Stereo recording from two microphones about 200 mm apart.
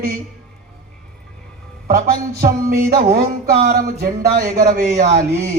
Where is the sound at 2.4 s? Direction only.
45° right (ahead or behind).